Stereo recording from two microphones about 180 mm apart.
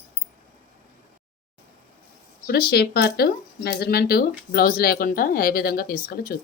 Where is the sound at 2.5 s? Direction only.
60° left (ahead or behind).